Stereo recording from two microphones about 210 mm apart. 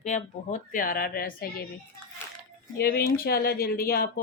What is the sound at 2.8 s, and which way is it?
Speech, 50° left (ahead or behind).